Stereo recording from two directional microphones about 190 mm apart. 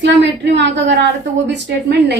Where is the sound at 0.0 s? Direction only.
65° right (ahead or behind).